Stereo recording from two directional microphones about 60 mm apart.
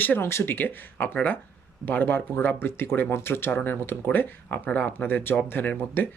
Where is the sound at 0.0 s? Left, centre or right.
Left.